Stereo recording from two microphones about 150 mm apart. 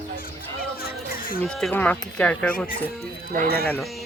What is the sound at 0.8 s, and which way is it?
Chatter, 80° left.